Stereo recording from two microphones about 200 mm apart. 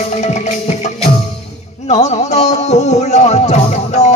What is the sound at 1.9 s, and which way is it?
Music, 35° left (ahead or behind).